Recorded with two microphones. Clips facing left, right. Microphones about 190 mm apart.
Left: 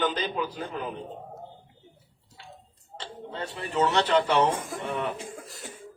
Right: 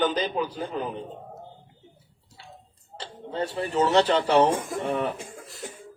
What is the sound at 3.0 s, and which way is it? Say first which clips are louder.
A man's voice: right 5 dB; 35° right (ahead or behind).